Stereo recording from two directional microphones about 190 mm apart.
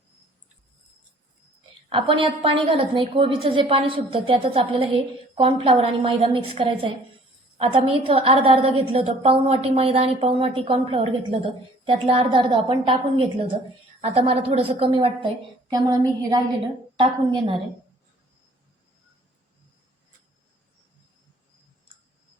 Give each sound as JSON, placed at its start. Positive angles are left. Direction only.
{"t": 1.9, "sound": "a woman's voice", "side_deg": -25}